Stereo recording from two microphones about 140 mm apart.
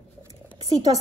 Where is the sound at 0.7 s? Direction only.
30° right (ahead or behind).